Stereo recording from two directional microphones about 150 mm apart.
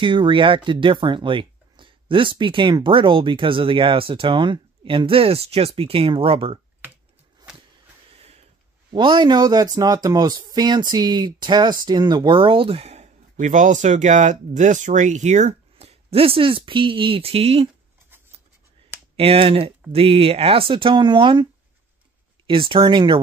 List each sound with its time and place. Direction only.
0.0 s speech: 30° right (ahead or behind)
8.9 s speech: 30° right (ahead or behind)
19.1 s speech: 40° right (ahead or behind)
22.5 s speech: 35° right (ahead or behind)